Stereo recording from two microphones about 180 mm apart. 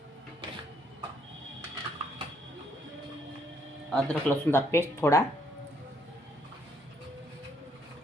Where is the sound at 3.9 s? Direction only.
5° left (ahead or behind).